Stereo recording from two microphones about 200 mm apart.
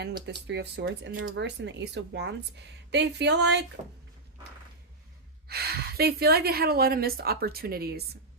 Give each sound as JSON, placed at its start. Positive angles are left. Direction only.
{"t": 0.3, "sound": "speech", "side_deg": -55}
{"t": 5.5, "sound": "speech", "side_deg": -50}